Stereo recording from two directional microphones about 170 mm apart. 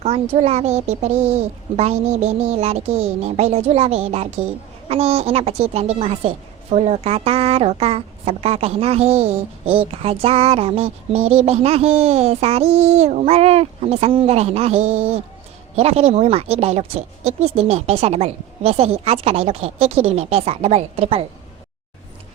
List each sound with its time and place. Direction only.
0.0 s a woman's voice: 40° right (ahead or behind)